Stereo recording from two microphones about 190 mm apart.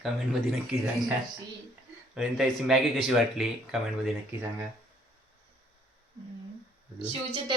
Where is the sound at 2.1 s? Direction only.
5° right (ahead or behind).